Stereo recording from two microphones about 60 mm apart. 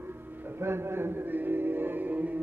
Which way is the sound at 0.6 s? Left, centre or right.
Right.